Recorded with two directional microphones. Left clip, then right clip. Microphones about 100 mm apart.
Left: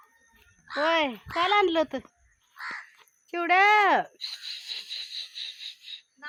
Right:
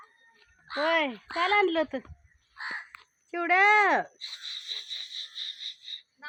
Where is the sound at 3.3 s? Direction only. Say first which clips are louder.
Left 1 dB; 60° left (ahead or behind); by 6.0 s 30° left (ahead or behind).